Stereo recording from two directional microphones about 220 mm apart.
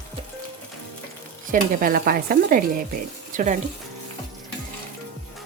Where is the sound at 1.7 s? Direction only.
40° right (ahead or behind).